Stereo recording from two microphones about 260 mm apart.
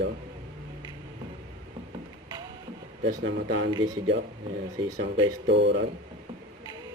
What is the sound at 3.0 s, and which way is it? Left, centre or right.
Speech, right.